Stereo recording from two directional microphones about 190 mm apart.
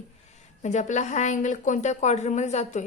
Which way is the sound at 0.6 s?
40° left (ahead or behind).